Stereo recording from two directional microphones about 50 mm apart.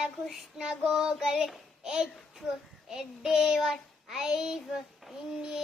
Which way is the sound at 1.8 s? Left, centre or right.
Centre.